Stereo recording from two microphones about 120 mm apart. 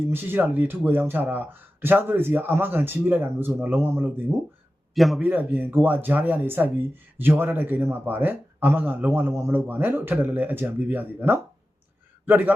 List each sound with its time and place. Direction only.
0.1 s speech: 15° right (ahead or behind)
4.9 s a man's voice: centre (ahead or behind)
5.2 s a man's voice: 15° right (ahead or behind)